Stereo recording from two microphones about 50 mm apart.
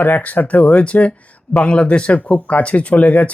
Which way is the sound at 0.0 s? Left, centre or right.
Left.